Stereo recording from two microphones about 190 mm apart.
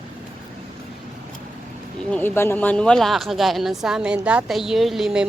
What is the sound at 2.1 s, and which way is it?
Speech, 10° left (ahead or behind).